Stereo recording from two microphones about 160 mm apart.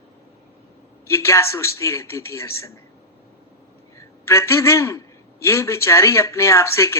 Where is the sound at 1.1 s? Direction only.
15° left (ahead or behind).